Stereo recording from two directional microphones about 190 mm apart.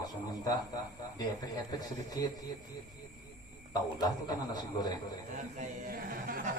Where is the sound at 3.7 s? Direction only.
20° left (ahead or behind).